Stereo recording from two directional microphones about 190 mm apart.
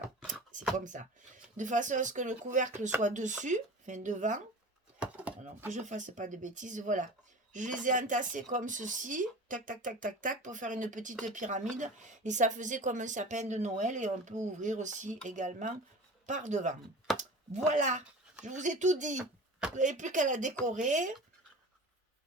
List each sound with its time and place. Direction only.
0.5 s a sound: 40° right (ahead or behind)
0.9 s a woman's voice: 45° right (ahead or behind)
4.9 s chopping: 5° right (ahead or behind)
5.7 s a woman's voice: 40° right (ahead or behind)